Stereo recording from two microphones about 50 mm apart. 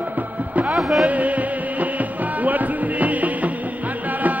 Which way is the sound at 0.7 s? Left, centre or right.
Centre.